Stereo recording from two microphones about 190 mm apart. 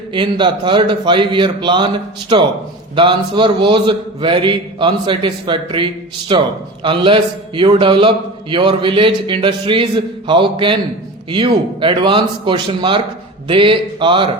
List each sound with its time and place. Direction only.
0.1 s a man's voice: 25° right (ahead or behind)
2.9 s a man's voice: 25° right (ahead or behind)